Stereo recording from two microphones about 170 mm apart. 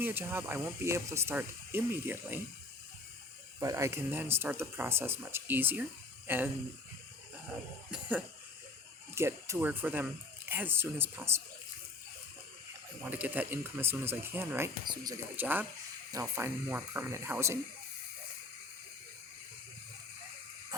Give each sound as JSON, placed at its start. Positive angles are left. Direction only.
{"t": 0.0, "sound": "speech", "side_deg": -10}
{"t": 3.6, "sound": "speech", "side_deg": -20}
{"t": 9.1, "sound": "speech", "side_deg": -15}
{"t": 13.1, "sound": "speech", "side_deg": -10}